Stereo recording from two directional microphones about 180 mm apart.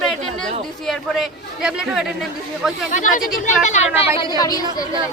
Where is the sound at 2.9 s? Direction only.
50° left (ahead or behind); by 4.6 s 20° left (ahead or behind).